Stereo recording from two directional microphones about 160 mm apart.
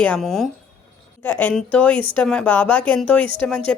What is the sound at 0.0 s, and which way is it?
A woman's voice, 5° left (ahead or behind).